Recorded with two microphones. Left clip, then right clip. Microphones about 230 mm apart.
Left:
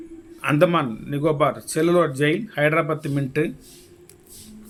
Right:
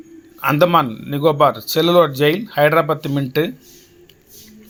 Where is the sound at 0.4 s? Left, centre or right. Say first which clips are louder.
Right 5 dB; centre.